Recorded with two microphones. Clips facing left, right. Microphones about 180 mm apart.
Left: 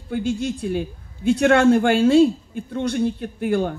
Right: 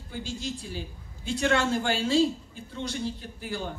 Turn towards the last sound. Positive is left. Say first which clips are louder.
# left 13 dB
turn(degrees=60)  # may be behind; listen again after turning